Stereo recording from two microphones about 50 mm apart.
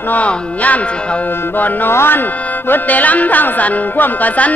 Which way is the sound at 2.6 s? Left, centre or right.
Left.